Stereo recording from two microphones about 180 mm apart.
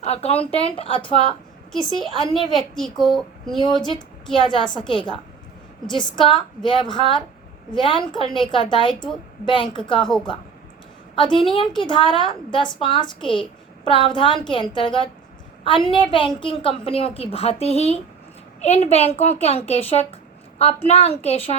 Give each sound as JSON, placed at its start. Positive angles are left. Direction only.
{"t": 0.0, "sound": "a woman's voice", "side_deg": 35}
{"t": 1.7, "sound": "a woman's voice", "side_deg": 0}
{"t": 3.6, "sound": "a woman's voice", "side_deg": 25}
{"t": 11.1, "sound": "a woman's voice", "side_deg": 30}